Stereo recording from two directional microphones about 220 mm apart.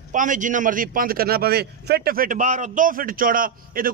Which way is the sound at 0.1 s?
35° right (ahead or behind).